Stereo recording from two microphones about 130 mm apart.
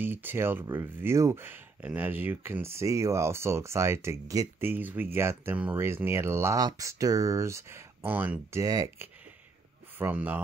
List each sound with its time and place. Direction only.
0.0 s speech: 15° right (ahead or behind)
9.9 s speech: 15° right (ahead or behind)